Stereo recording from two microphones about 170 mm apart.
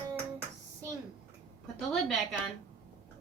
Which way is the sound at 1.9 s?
Centre (ahead or behind).